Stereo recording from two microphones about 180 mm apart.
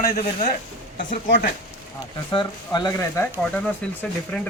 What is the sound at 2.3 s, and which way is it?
Speech, 25° left (ahead or behind).